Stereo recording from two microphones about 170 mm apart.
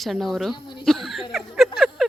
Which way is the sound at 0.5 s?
25° left (ahead or behind).